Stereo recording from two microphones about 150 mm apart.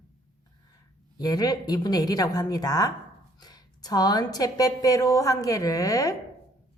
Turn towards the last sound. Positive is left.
turn(degrees=25)  # may be behind; listen again after turning